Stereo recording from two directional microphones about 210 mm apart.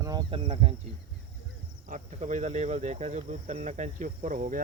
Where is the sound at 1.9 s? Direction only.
35° right (ahead or behind).